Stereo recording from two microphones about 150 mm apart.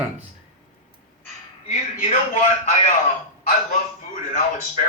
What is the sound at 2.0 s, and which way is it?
Speech, 50° left (ahead or behind).